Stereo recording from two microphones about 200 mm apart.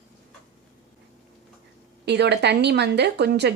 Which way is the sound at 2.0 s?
55° right (ahead or behind).